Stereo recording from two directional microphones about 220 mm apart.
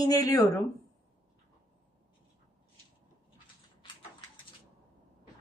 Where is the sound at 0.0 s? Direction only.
15° left (ahead or behind).